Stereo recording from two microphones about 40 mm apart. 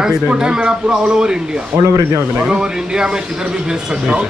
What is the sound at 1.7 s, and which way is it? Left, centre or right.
Speech, right.